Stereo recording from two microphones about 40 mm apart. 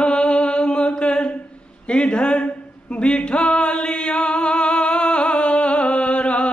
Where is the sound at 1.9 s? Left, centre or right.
Left.